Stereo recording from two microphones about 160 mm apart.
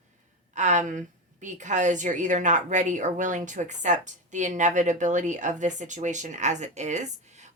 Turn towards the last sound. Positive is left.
turn(degrees=-45)  # may be behind; listen again after turning